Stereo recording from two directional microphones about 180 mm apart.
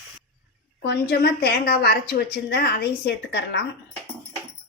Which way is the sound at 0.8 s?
65° left (ahead or behind).